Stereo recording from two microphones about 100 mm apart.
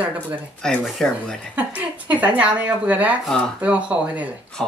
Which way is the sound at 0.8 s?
Centre (ahead or behind).